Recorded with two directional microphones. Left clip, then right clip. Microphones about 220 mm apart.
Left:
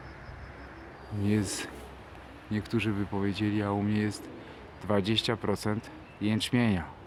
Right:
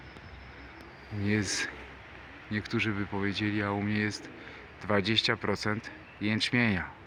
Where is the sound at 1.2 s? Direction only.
Centre (ahead or behind).